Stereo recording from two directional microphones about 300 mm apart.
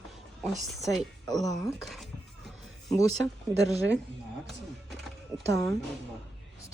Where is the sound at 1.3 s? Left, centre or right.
Centre.